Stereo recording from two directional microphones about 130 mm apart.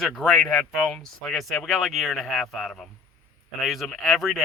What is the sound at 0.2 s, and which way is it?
Speech, 5° left (ahead or behind).